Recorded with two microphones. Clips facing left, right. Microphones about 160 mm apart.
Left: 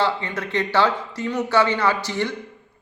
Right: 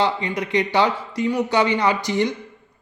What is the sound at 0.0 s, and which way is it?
A man's voice, 15° right (ahead or behind).